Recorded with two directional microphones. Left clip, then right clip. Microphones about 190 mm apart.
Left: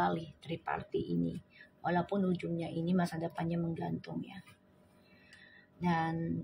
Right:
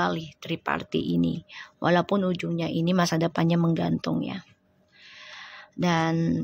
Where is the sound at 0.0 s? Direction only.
25° right (ahead or behind).